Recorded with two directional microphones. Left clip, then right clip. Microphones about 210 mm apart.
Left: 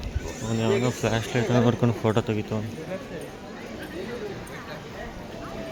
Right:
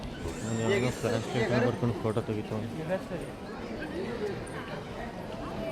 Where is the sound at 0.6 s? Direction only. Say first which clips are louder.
Left 4 dB; 45° left (ahead or behind).